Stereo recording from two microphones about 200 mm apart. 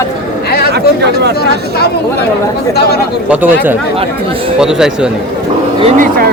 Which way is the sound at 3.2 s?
10° right (ahead or behind).